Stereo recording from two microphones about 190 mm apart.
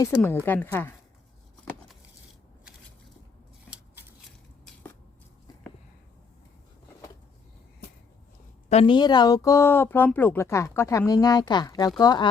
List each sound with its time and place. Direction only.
0.0 s a woman's voice: 10° left (ahead or behind)
8.7 s speech: 25° left (ahead or behind)